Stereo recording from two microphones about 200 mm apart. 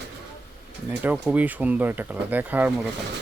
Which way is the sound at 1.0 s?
10° right (ahead or behind).